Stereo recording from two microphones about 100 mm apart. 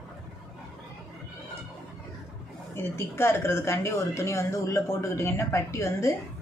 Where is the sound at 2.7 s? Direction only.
25° left (ahead or behind).